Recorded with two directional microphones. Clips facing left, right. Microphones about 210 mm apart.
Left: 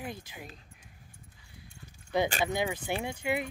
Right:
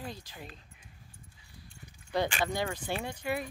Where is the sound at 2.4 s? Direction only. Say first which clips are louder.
Left 2 dB; 15° left (ahead or behind).